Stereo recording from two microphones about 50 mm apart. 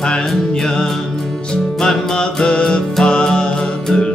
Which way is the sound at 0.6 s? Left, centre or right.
Centre.